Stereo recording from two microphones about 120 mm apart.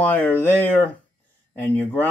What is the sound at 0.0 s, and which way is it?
Speech, 15° left (ahead or behind).